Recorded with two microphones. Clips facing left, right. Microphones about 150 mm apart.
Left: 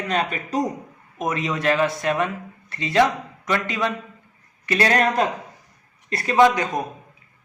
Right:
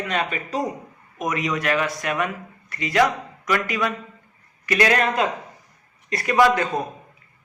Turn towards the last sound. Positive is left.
turn(degrees=15)  # may be behind; listen again after turning